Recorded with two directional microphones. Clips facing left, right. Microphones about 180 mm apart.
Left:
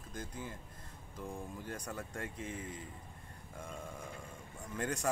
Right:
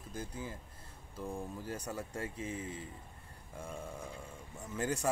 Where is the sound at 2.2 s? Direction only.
30° right (ahead or behind).